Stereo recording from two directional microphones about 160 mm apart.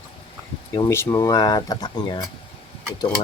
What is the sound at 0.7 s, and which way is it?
Speech, 20° left (ahead or behind).